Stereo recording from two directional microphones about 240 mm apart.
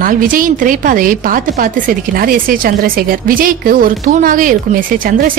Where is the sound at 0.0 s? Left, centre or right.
Right.